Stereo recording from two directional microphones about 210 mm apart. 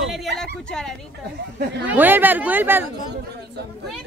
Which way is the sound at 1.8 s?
10° right (ahead or behind).